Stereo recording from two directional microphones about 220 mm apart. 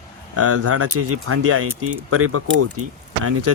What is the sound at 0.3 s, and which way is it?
Speech, 90° right.